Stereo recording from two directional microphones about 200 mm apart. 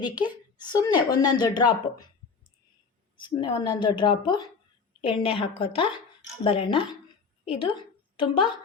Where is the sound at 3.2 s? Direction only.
20° left (ahead or behind).